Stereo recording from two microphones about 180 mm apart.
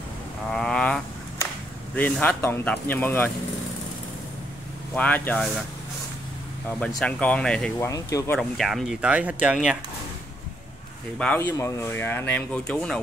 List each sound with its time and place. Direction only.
0.5 s a sound: 5° left (ahead or behind)
2.0 s speech: 10° left (ahead or behind)
4.9 s speech: 10° left (ahead or behind)
7.0 s speech: 5° left (ahead or behind)
7.8 s speech: 20° left (ahead or behind)
8.4 s speech: centre (ahead or behind)
11.1 s speech: 10° left (ahead or behind)